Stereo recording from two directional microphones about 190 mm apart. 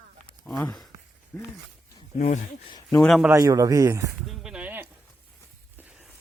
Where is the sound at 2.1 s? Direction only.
35° left (ahead or behind).